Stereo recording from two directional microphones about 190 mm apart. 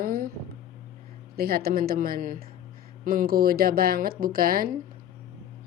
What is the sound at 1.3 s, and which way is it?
A woman's voice, 55° right (ahead or behind).